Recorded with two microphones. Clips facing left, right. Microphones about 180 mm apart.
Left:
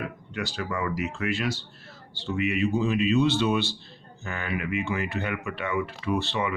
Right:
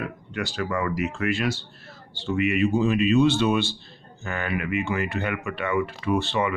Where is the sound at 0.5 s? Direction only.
55° right (ahead or behind).